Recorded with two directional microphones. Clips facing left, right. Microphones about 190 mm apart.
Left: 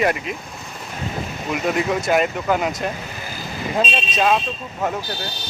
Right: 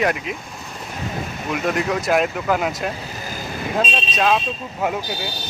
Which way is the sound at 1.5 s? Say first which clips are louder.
Left 1 dB; centre (ahead or behind).